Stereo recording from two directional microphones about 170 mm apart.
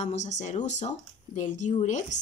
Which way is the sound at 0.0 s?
45° left (ahead or behind).